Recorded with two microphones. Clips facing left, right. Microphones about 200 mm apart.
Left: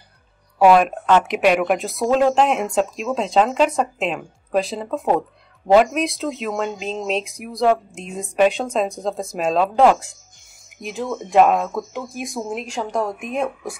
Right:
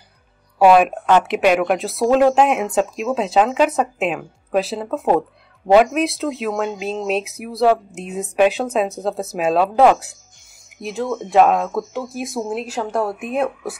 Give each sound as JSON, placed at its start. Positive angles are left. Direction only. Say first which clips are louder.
{"t": 0.6, "sound": "speech", "louder": "right 1 dB", "side_deg": -5}